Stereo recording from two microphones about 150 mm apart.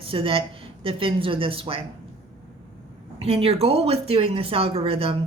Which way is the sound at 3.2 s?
40° right (ahead or behind).